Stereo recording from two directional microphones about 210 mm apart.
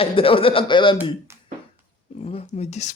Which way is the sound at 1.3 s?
10° right (ahead or behind).